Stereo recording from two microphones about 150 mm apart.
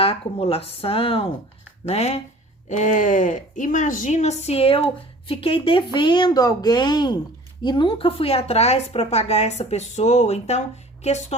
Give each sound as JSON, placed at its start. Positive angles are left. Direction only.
{"t": 0.0, "sound": "a woman's voice", "side_deg": 40}
{"t": 2.6, "sound": "a woman's voice", "side_deg": 55}